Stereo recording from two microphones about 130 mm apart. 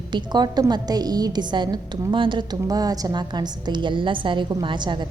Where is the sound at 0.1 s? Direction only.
35° right (ahead or behind).